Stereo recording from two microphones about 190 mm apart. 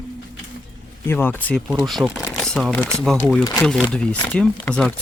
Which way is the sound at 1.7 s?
5° right (ahead or behind).